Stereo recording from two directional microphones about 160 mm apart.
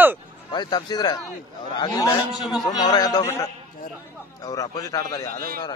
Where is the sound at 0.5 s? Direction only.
25° left (ahead or behind).